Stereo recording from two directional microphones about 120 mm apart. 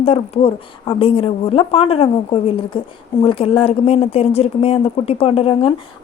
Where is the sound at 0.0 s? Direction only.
60° left (ahead or behind).